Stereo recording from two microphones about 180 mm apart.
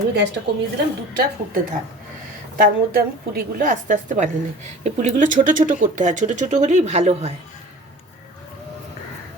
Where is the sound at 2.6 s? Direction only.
50° right (ahead or behind); by 7.3 s 35° right (ahead or behind).